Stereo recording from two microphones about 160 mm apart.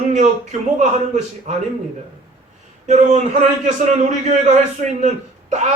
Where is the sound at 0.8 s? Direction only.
45° right (ahead or behind).